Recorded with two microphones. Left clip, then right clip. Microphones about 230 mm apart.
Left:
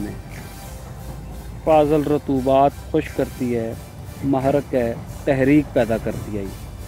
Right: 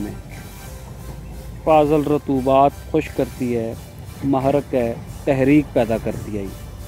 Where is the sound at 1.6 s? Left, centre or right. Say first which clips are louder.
Right 1 dB; right.